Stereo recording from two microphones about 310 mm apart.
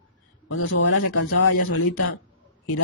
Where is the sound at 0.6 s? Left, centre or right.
Left.